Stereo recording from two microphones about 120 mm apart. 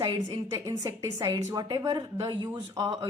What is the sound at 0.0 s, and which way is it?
Speech, 35° right (ahead or behind).